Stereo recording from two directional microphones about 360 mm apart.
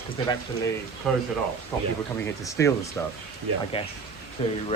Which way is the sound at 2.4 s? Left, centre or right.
Centre.